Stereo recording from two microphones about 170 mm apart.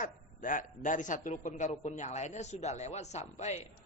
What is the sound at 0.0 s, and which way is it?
A man's voice, 50° left (ahead or behind).